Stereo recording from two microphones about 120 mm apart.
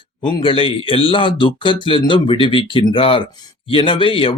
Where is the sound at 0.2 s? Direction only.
45° left (ahead or behind).